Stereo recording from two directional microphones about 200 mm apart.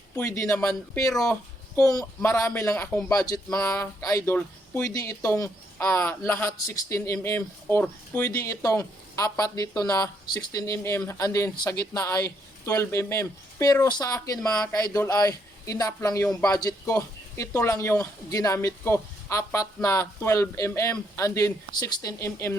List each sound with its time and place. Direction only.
0.2 s speech: 15° left (ahead or behind)